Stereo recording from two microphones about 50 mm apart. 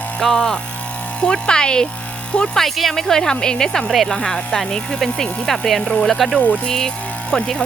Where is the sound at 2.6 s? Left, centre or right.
Centre.